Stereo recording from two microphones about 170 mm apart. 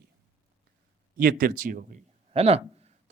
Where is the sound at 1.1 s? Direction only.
60° right (ahead or behind).